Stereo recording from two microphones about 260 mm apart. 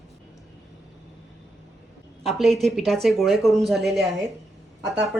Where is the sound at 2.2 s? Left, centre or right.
Centre.